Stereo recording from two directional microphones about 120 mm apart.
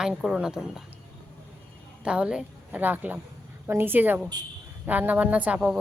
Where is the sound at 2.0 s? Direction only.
10° right (ahead or behind).